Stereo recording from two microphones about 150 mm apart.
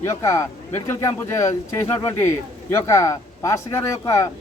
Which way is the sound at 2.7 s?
20° left (ahead or behind).